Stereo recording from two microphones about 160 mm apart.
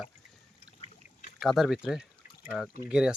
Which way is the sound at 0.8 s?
50° left (ahead or behind).